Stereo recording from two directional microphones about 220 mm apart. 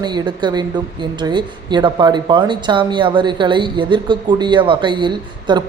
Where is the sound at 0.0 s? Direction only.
20° right (ahead or behind).